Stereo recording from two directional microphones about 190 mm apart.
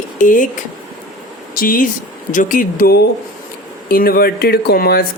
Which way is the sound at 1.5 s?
50° left (ahead or behind).